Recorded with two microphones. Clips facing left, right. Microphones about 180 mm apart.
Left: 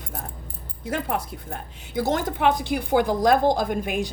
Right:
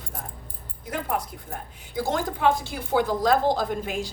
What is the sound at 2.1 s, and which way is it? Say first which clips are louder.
Speech: left 1 dB; 70° left (ahead or behind).